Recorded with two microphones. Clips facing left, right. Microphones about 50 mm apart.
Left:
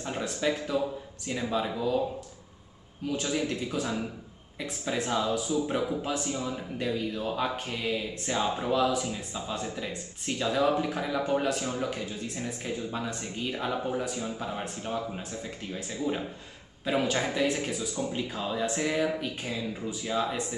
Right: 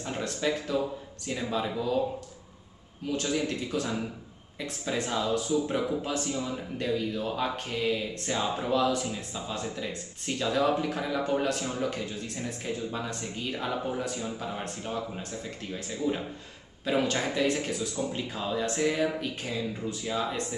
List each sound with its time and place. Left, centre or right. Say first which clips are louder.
0.0 s speech: left 1 dB; centre
3.1 s speech: even; centre